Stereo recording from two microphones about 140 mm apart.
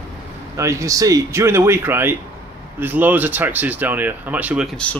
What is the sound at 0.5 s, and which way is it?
Speech, 20° right (ahead or behind).